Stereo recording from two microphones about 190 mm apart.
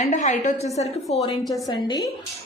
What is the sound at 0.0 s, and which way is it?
Speech, 40° left (ahead or behind).